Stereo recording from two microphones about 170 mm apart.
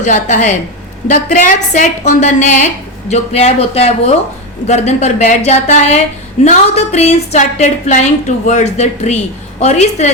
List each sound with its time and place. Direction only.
0.0 s a woman's voice: 45° left (ahead or behind)